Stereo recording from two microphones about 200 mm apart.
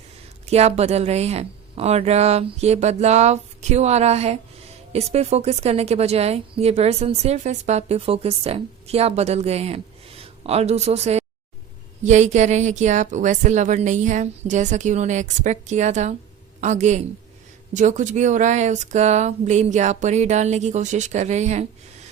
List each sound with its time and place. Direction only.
0.4 s a woman's voice: 30° right (ahead or behind)